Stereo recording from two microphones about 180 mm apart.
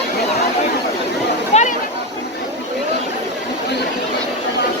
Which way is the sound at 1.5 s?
35° left (ahead or behind).